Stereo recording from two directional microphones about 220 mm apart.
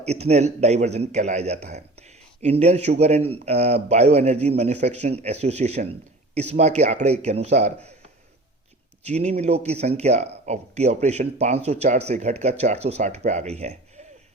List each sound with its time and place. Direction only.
0.0 s a man's voice: 30° right (ahead or behind)
9.0 s a man's voice: 30° right (ahead or behind)